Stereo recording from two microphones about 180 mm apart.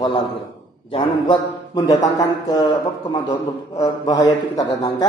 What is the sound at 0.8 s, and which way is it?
Mantra, 30° left (ahead or behind).